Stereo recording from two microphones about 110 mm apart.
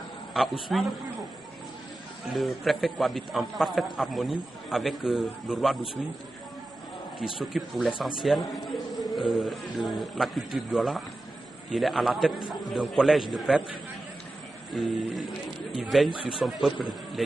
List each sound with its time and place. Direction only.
0.3 s a man's voice: centre (ahead or behind)
2.3 s a man's voice: centre (ahead or behind)
7.2 s a man's voice: centre (ahead or behind)
14.7 s a man's voice: centre (ahead or behind)